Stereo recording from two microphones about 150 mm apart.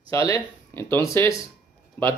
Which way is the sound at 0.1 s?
20° left (ahead or behind).